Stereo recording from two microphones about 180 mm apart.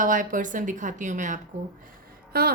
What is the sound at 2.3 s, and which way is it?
Speech, 55° right (ahead or behind).